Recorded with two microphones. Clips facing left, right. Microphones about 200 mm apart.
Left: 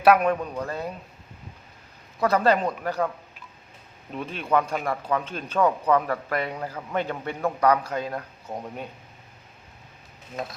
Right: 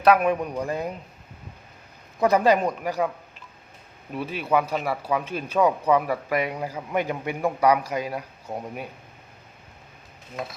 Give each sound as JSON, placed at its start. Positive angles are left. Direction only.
{"t": 0.0, "sound": "a man's voice", "side_deg": 0}
{"t": 0.3, "sound": "speech", "side_deg": -15}
{"t": 2.2, "sound": "speech", "side_deg": -15}
{"t": 4.1, "sound": "speech", "side_deg": -5}